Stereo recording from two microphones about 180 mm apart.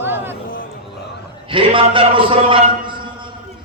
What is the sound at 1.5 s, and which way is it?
A man's voice, 30° right (ahead or behind).